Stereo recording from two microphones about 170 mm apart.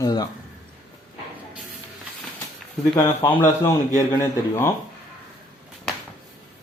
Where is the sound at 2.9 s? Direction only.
25° left (ahead or behind).